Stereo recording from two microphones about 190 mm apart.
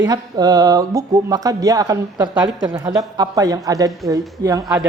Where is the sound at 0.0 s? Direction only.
20° right (ahead or behind).